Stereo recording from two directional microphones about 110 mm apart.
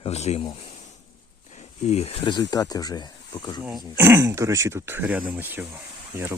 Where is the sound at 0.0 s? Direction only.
75° left (ahead or behind).